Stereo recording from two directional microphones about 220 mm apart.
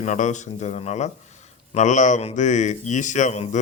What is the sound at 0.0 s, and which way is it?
Speech, 35° left (ahead or behind).